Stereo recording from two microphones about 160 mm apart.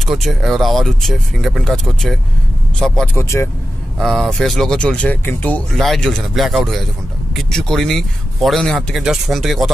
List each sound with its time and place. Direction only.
0.0 s speech: centre (ahead or behind)
3.2 s speech: 15° left (ahead or behind)
4.0 s speech: centre (ahead or behind)